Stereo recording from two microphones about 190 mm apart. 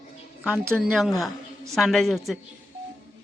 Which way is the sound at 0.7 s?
5° right (ahead or behind).